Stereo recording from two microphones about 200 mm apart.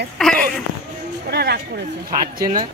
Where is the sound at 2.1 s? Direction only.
20° right (ahead or behind).